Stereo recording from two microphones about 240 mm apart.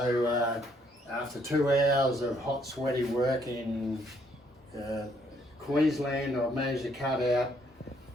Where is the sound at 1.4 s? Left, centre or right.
Centre.